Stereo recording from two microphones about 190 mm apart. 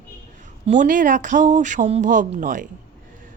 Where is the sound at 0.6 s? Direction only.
40° right (ahead or behind).